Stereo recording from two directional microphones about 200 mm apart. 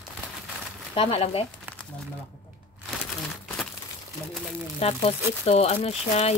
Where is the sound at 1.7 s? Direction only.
10° right (ahead or behind).